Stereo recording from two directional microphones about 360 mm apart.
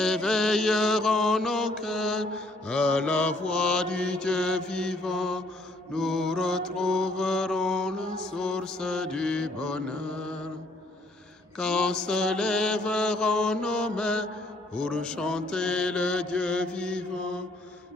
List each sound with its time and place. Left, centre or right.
0.0 s mantra: centre
11.5 s mantra: centre